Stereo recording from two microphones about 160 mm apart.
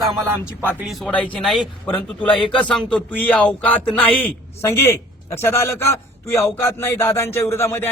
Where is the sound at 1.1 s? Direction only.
10° left (ahead or behind).